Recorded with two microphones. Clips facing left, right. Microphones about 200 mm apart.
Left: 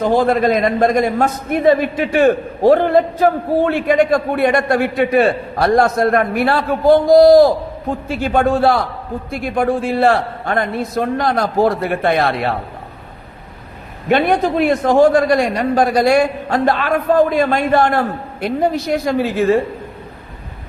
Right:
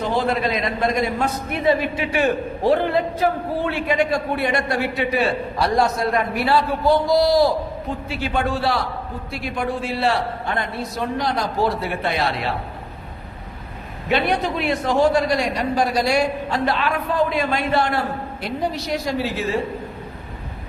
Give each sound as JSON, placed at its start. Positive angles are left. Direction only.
{"t": 0.0, "sound": "a man's voice", "side_deg": 45}
{"t": 14.1, "sound": "a man's voice", "side_deg": 50}